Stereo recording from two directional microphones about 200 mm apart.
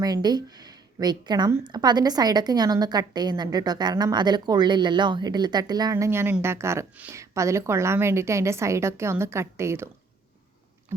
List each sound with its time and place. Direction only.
0.0 s a woman's voice: 20° right (ahead or behind)